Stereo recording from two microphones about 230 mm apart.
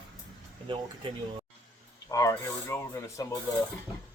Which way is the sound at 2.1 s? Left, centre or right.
Centre.